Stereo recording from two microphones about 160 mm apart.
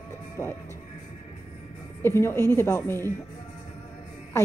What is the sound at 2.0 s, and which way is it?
A woman's voice, 15° left (ahead or behind).